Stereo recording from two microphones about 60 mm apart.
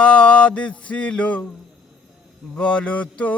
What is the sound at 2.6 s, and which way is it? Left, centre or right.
Male singing, centre.